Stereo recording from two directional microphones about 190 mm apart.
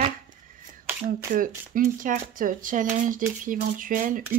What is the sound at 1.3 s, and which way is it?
Speech, 45° right (ahead or behind).